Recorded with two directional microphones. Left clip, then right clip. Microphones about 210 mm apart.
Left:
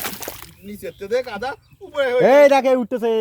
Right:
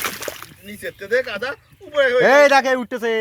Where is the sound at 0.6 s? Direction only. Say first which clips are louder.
Even; 65° left (ahead or behind).